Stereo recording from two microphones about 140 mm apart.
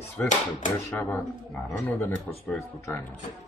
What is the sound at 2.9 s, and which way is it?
Speech, 20° left (ahead or behind).